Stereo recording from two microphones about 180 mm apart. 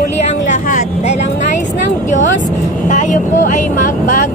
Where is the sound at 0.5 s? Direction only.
45° left (ahead or behind).